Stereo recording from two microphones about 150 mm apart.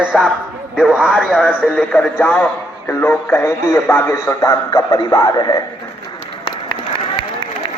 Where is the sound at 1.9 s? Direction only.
10° left (ahead or behind); by 5.5 s 25° left (ahead or behind).